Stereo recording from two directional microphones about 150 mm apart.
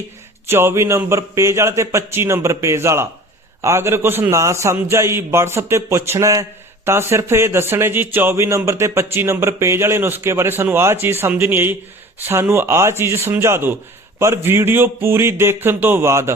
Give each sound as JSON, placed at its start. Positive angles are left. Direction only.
{"t": 0.4, "sound": "a man's voice", "side_deg": -15}